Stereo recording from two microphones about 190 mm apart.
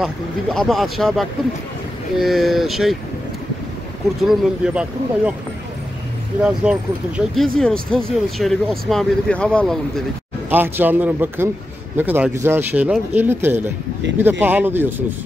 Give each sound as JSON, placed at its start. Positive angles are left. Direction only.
{"t": 0.0, "sound": "speech", "side_deg": 0}
{"t": 4.2, "sound": "speech", "side_deg": 0}
{"t": 6.4, "sound": "speech", "side_deg": -5}
{"t": 10.5, "sound": "speech", "side_deg": -10}
{"t": 14.0, "sound": "speech", "side_deg": -70}
{"t": 14.4, "sound": "speech", "side_deg": -10}